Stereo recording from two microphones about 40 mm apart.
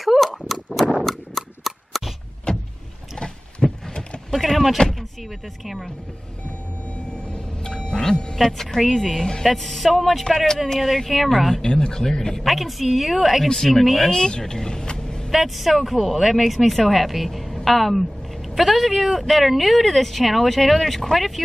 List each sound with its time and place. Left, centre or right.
0.0 s horse: centre
1.0 s a sound: centre
2.5 s vehicle: left
3.2 s a sound: left
4.3 s speech: centre
7.6 s music: centre
8.4 s speech: centre
10.2 s speech: centre
11.6 s speech: centre
12.4 s speech: centre
14.1 s speech: centre
15.3 s speech: centre